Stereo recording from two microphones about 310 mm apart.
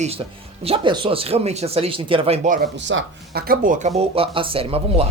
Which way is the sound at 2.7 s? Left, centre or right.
Right.